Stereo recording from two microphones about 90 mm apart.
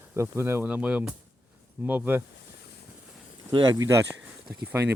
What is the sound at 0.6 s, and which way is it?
Speech, 15° right (ahead or behind).